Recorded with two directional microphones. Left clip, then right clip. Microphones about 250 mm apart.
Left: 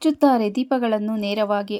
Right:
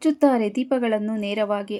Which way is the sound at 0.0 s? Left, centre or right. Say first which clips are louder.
Left 1 dB; centre.